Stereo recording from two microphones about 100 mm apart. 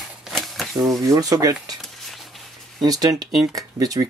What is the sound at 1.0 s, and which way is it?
Speech, 35° right (ahead or behind).